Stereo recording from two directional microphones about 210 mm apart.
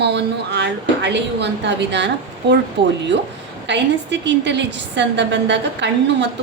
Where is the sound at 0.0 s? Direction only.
55° right (ahead or behind).